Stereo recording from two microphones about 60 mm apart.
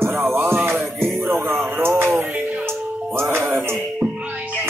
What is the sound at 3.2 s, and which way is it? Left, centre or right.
Music, right.